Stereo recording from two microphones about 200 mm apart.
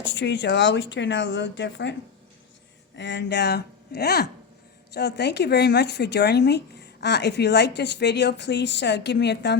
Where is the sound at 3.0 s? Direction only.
60° left (ahead or behind).